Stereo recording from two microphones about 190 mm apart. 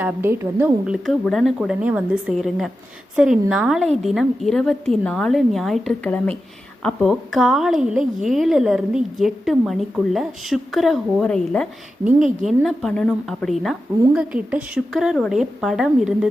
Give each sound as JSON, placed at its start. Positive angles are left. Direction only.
{"t": 0.0, "sound": "a woman's voice", "side_deg": -10}
{"t": 1.0, "sound": "a woman's voice", "side_deg": 0}
{"t": 12.0, "sound": "a woman's voice", "side_deg": -40}
{"t": 12.6, "sound": "a woman's voice", "side_deg": 5}